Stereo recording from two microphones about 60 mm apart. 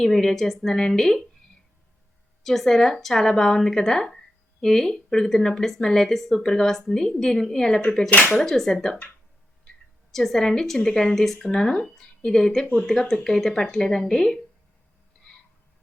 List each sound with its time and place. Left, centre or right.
0.0 s speech: centre
2.4 s speech: centre
10.1 s speech: centre